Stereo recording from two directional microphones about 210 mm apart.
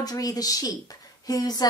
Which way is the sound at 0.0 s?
15° left (ahead or behind).